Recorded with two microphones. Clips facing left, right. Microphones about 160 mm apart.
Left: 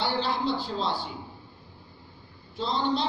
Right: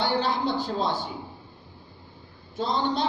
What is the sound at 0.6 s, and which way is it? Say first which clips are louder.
Speech: right 3 dB; 45° right (ahead or behind).